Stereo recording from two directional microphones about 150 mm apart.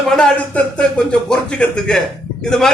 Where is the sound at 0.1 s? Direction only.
5° left (ahead or behind).